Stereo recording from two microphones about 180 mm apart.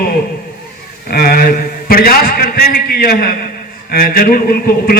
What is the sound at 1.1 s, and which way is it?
A man's voice, 55° left (ahead or behind).